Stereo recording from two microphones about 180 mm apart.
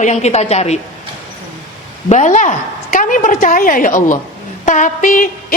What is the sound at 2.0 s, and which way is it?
A woman's voice, 45° left (ahead or behind).